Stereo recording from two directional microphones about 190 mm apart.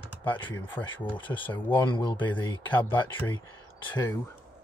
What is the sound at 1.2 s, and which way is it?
Speech, 25° left (ahead or behind).